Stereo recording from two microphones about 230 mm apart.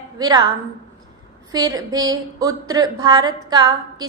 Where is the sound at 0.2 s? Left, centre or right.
Centre.